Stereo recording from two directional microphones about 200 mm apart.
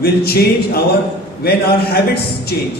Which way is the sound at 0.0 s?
50° left (ahead or behind).